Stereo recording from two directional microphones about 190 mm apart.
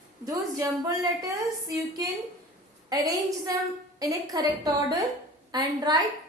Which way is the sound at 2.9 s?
20° right (ahead or behind).